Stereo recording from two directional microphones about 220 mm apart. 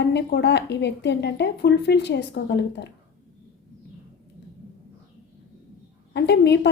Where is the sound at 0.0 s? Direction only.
50° left (ahead or behind).